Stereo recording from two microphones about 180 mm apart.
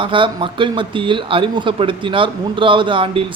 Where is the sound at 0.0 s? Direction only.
30° right (ahead or behind).